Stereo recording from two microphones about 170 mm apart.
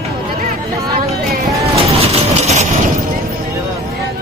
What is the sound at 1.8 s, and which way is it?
Vehicle, 35° right (ahead or behind).